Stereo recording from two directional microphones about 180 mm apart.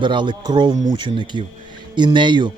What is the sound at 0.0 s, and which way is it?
Speech, 25° right (ahead or behind).